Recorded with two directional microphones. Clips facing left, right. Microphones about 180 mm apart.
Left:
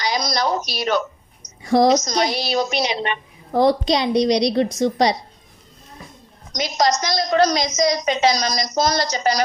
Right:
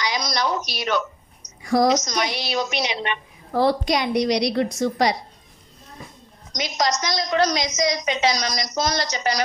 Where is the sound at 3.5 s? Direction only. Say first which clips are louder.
Left 3 dB; 20° left (ahead or behind).